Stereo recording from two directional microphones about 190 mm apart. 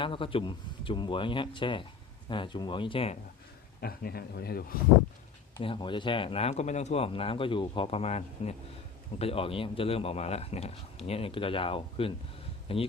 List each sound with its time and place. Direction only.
0.0 s speech: 25° left (ahead or behind)
3.8 s a man's voice: 55° left (ahead or behind)
5.5 s a man's voice: 25° left (ahead or behind)